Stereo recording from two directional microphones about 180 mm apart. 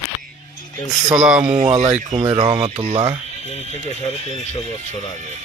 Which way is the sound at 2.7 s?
35° right (ahead or behind).